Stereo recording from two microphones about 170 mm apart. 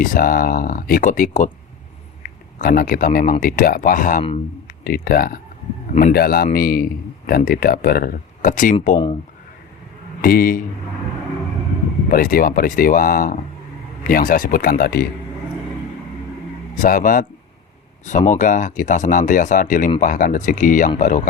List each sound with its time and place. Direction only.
0.0 s a man's voice: 55° left (ahead or behind)
2.6 s a man's voice: 55° left (ahead or behind)
10.2 s a man's voice: 60° left (ahead or behind)
12.1 s a man's voice: 60° left (ahead or behind)
16.8 s speech: 55° left (ahead or behind)